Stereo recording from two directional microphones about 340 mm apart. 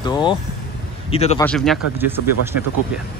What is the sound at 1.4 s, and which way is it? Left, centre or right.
Speech, centre.